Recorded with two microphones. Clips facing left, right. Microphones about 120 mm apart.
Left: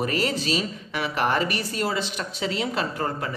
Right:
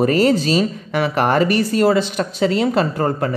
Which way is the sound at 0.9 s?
50° right (ahead or behind).